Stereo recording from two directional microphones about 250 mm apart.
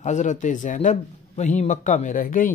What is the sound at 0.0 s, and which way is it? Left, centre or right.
A man's voice, left.